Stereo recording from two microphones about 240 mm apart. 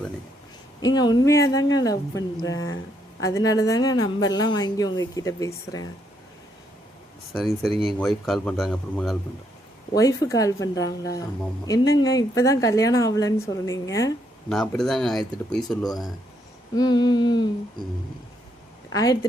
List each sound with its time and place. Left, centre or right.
0.9 s speech: centre
7.3 s speech: centre
9.9 s speech: centre
14.5 s speech: centre
15.8 s speech: centre
18.9 s a woman's voice: centre